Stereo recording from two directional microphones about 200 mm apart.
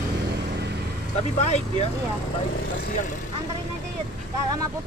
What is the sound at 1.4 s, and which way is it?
Speech, 35° left (ahead or behind).